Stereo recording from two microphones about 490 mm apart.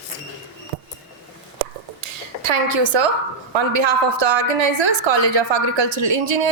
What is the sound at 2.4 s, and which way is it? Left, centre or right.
Speech, right.